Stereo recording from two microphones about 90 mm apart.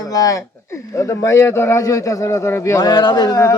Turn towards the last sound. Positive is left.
turn(degrees=50)  # may be behind; listen again after turning